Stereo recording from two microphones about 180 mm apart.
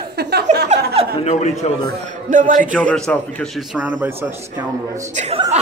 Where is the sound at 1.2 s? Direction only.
35° left (ahead or behind).